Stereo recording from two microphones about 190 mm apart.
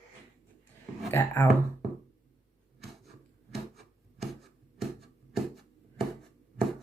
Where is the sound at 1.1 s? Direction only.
15° left (ahead or behind).